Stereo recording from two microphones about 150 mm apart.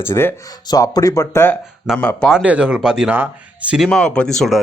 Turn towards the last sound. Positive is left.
turn(degrees=0)  # may be behind; listen again after turning